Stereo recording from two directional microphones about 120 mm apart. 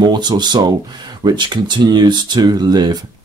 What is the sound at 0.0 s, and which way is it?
Speech, 35° right (ahead or behind).